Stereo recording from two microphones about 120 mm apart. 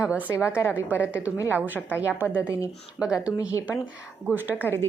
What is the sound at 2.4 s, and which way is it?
Speech, 20° left (ahead or behind).